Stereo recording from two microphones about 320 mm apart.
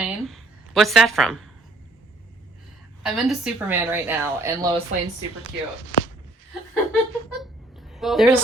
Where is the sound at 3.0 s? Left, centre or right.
Centre.